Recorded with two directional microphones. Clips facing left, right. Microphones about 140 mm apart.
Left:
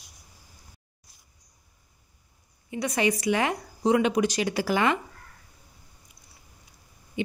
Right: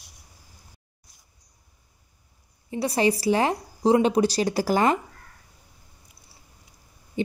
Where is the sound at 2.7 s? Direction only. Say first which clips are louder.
Right 3 dB; 35° right (ahead or behind).